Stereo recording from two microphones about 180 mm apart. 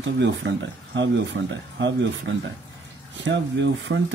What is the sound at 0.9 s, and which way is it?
Speech, 90° right.